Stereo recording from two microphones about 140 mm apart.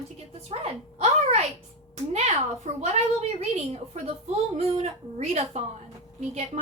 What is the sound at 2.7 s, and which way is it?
A woman's voice, 55° right (ahead or behind).